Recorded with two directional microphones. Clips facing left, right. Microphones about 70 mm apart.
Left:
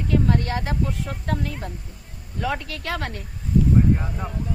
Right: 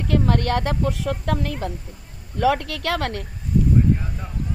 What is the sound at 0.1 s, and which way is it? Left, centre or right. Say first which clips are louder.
Speech: right 2 dB; right.